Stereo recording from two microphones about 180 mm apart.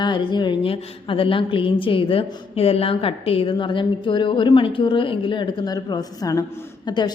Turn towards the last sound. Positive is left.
turn(degrees=25)  # may be behind; listen again after turning